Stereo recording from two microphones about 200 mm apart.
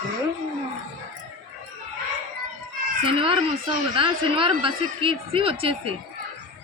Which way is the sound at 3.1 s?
25° right (ahead or behind).